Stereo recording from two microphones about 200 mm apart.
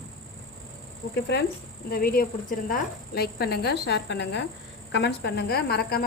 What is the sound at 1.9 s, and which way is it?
A woman's voice, 50° left (ahead or behind).